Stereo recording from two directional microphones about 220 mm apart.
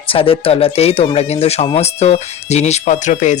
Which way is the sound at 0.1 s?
25° left (ahead or behind).